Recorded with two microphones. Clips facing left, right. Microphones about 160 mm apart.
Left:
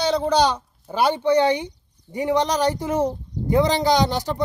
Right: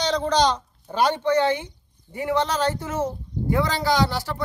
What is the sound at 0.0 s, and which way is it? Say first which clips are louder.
A woman's voice: left 2 dB; 10° left (ahead or behind).